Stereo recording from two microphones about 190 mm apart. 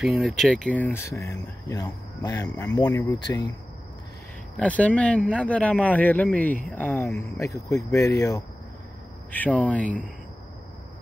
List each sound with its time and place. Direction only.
0.0 s speech: centre (ahead or behind); by 3.4 s 20° left (ahead or behind)
4.6 s speech: 5° left (ahead or behind)